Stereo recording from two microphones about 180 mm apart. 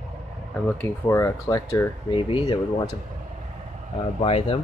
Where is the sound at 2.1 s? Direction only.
30° left (ahead or behind).